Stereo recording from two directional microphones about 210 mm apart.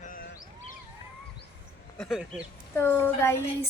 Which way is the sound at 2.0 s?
Centre (ahead or behind).